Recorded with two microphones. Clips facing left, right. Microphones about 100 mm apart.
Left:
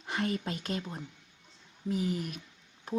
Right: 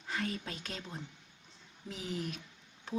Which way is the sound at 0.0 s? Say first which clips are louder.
Left 4 dB; 20° left (ahead or behind).